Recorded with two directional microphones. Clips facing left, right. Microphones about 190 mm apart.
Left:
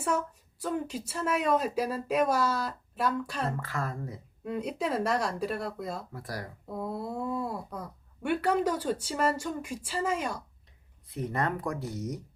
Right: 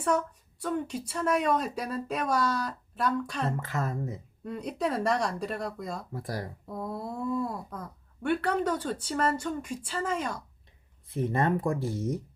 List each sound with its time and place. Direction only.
0.0 s a woman's voice: 5° left (ahead or behind)
3.6 s speech: 25° right (ahead or behind)
4.5 s speech: 5° left (ahead or behind)
6.1 s speech: 25° right (ahead or behind)
6.7 s a woman's voice: 10° left (ahead or behind)
11.1 s speech: 25° right (ahead or behind)